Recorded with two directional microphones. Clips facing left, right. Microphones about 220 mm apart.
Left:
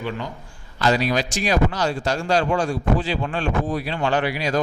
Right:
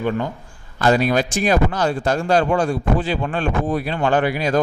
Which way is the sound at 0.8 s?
50° right (ahead or behind).